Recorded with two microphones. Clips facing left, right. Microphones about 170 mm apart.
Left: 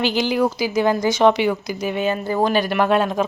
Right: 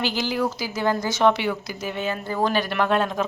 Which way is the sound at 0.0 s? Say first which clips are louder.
Left 5 dB; 15° left (ahead or behind).